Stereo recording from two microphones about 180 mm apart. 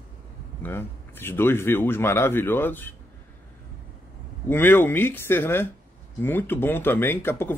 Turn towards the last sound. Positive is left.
turn(degrees=10)  # may be behind; listen again after turning